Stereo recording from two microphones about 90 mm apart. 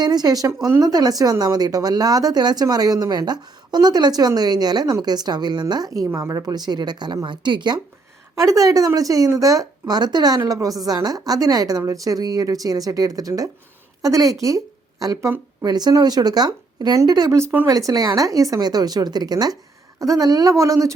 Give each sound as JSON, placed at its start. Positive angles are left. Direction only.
{"t": 0.0, "sound": "speech", "side_deg": -50}
{"t": 6.5, "sound": "speech", "side_deg": -50}
{"t": 8.4, "sound": "a woman's voice", "side_deg": -40}